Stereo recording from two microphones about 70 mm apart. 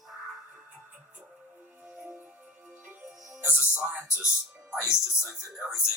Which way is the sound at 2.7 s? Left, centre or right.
Right.